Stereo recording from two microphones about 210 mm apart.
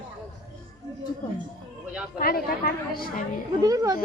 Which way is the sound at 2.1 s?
45° left (ahead or behind).